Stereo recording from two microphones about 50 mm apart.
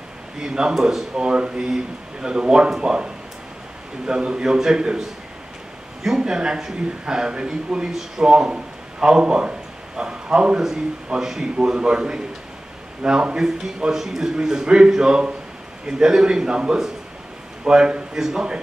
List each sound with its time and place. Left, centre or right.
0.4 s a man's voice: centre
0.7 s speech: centre
1.1 s a man's voice: centre
6.0 s a man's voice: centre